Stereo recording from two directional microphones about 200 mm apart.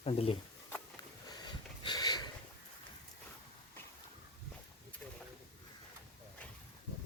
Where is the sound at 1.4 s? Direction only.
20° left (ahead or behind).